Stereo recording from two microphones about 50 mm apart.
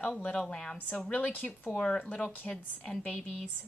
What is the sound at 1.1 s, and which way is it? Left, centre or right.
Speech, left.